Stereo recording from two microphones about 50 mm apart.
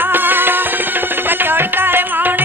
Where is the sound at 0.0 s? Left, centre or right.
Right.